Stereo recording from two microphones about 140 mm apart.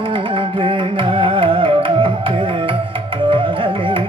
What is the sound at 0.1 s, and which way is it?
Music, 40° right (ahead or behind).